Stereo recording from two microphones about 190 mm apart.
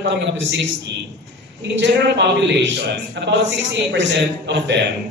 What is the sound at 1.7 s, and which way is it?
A man's voice, 70° right (ahead or behind).